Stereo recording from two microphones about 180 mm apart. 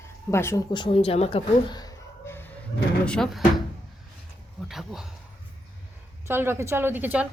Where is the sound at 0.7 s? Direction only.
30° left (ahead or behind); by 2.6 s 10° left (ahead or behind).